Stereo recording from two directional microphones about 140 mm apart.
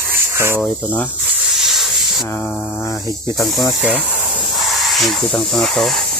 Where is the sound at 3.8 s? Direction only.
10° right (ahead or behind).